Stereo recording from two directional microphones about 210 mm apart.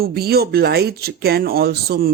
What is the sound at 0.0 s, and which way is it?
Speech, 45° right (ahead or behind).